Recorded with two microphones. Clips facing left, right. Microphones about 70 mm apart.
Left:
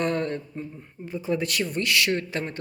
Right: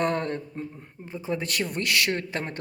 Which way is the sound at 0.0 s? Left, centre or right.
Right.